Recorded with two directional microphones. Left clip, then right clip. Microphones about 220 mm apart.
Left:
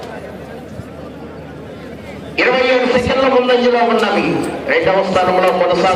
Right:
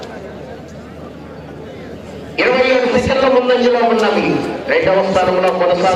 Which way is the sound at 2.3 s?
45° left (ahead or behind).